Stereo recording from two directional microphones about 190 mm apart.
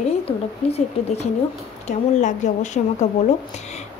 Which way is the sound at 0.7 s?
35° left (ahead or behind).